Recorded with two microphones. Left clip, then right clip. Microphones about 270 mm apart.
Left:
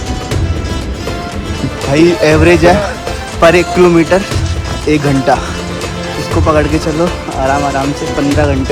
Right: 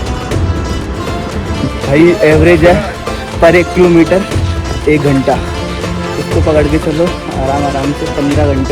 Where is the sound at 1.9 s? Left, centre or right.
Centre.